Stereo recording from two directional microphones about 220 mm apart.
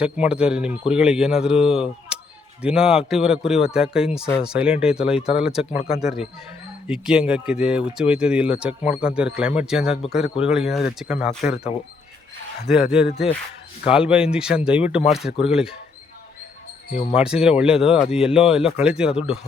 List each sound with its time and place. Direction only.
0.0 s a man's voice: 5° right (ahead or behind)
12.6 s a man's voice: centre (ahead or behind)
17.2 s a man's voice: 5° right (ahead or behind)